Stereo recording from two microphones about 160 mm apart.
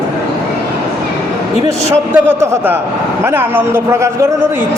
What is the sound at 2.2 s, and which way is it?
A man's voice, 15° right (ahead or behind).